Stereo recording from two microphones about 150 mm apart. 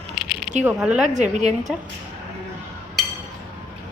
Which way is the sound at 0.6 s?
5° right (ahead or behind).